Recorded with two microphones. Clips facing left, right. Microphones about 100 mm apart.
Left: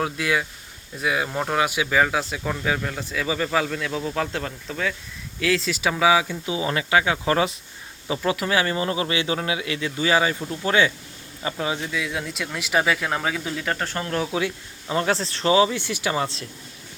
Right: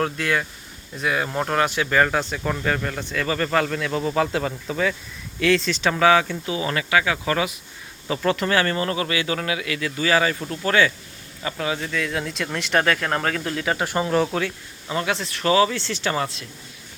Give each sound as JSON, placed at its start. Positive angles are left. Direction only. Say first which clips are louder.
{"t": 0.0, "sound": "speech", "louder": "right 1 dB", "side_deg": 10}
{"t": 8.0, "sound": "speech", "louder": "right 2 dB", "side_deg": 10}
{"t": 11.9, "sound": "speech", "louder": "right 2 dB", "side_deg": 5}
{"t": 14.2, "sound": "speech", "louder": "right 2 dB", "side_deg": 0}
{"t": 14.4, "sound": "speech", "louder": "left 1 dB", "side_deg": 25}
{"t": 16.2, "sound": "speech", "louder": "left 1 dB", "side_deg": 30}